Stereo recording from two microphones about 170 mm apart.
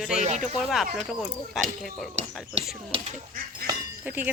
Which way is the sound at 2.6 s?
35° right (ahead or behind).